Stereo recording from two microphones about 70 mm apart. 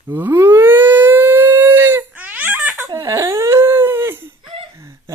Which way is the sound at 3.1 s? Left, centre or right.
Right.